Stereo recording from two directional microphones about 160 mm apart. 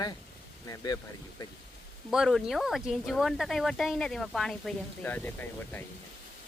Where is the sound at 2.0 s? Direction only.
Centre (ahead or behind).